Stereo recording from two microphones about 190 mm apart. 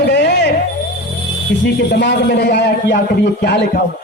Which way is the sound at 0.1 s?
60° left (ahead or behind).